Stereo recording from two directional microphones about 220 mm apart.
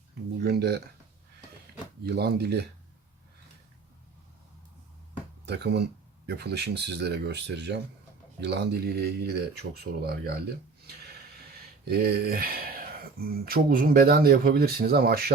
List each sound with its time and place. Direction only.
0.4 s speech: 50° right (ahead or behind)
2.0 s speech: 45° right (ahead or behind)
5.5 s speech: 50° right (ahead or behind)
11.9 s speech: 45° right (ahead or behind)